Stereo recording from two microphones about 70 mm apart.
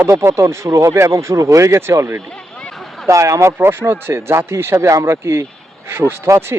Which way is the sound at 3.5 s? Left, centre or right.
Right.